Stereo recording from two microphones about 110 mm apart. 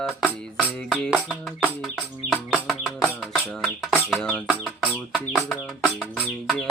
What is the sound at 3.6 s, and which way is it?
Speech, 5° right (ahead or behind).